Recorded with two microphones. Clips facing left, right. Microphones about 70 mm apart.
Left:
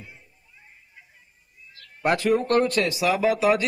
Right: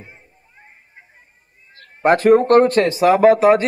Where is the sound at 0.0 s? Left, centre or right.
Right.